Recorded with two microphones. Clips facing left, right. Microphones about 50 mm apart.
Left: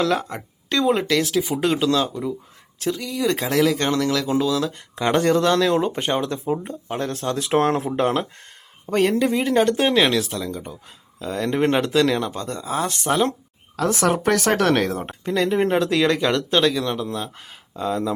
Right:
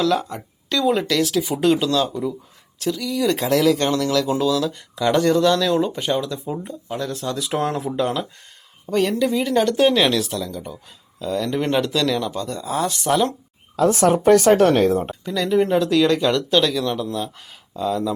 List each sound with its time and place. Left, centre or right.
0.0 s speech: left
0.9 s speech: centre
3.2 s speech: centre
4.5 s speech: left
6.2 s speech: left
8.9 s speech: left
9.6 s speech: centre
12.5 s speech: centre
13.7 s a woman's voice: left
15.0 s speech: left
15.4 s speech: left
15.8 s speech: left
16.5 s speech: centre